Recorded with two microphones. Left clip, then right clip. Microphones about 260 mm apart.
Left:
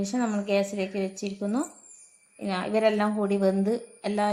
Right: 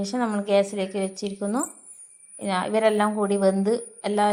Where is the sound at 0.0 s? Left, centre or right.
Right.